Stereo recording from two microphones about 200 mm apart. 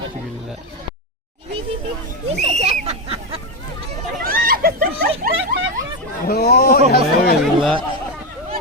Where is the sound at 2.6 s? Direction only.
30° right (ahead or behind).